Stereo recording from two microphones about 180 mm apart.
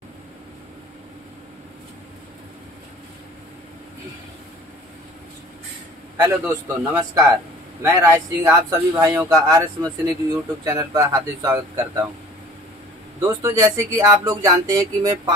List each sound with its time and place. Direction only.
6.1 s speech: 10° right (ahead or behind)
13.2 s speech: 15° right (ahead or behind)